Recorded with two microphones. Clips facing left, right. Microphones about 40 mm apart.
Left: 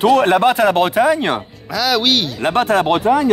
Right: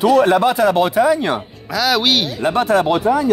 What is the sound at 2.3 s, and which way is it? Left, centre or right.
Speech, left.